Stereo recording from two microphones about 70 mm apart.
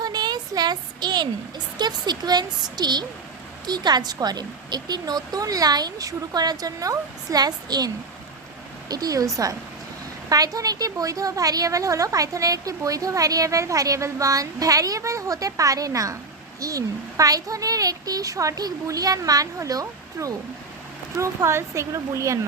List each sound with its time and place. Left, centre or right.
0.0 s a sound: right
2.7 s a woman's voice: right
8.9 s a woman's voice: right